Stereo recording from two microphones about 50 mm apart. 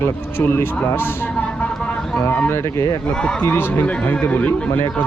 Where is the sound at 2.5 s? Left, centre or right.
Left.